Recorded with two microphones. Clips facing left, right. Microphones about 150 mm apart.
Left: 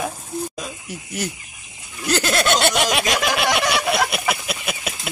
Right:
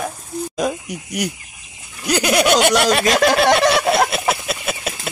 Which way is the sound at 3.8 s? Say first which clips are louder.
Right 4 dB; 30° right (ahead or behind).